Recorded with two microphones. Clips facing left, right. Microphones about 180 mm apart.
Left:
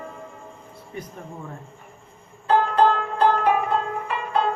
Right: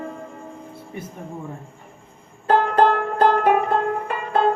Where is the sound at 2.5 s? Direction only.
55° right (ahead or behind).